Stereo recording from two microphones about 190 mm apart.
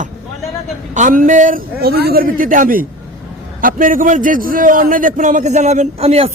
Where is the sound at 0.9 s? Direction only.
45° right (ahead or behind).